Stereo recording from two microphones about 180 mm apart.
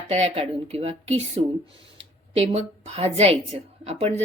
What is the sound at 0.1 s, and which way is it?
A woman's voice, 35° right (ahead or behind).